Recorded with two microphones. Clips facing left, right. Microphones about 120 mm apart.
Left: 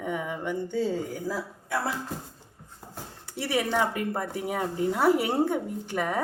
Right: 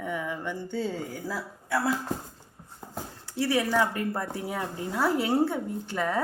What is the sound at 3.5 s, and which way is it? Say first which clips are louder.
A woman's voice: even; 20° left (ahead or behind).